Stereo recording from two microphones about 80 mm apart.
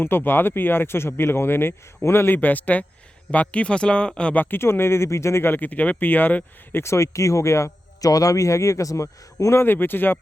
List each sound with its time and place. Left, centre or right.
0.0 s speech: left
4.4 s speech: left
6.8 s speech: left
9.6 s speech: left